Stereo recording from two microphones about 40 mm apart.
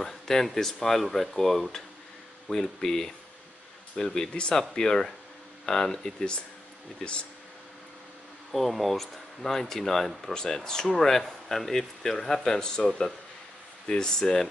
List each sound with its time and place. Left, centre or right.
0.0 s speech: centre
4.3 s speech: left
4.6 s speech: centre
7.0 s speech: left
8.5 s speech: centre